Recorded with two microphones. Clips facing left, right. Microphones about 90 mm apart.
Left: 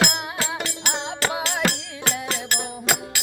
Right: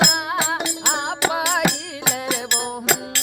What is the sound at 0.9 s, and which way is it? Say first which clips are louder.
Music: right 5 dB; 70° right (ahead or behind).